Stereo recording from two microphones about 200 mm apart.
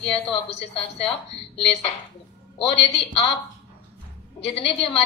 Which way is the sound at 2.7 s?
30° left (ahead or behind).